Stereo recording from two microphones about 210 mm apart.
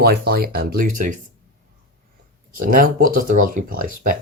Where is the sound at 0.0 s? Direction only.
45° right (ahead or behind).